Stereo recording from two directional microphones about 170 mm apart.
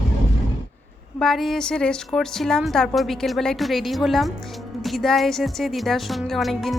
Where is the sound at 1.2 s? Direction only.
Centre (ahead or behind).